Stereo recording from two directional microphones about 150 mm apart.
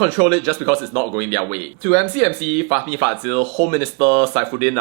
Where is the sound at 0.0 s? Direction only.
15° right (ahead or behind).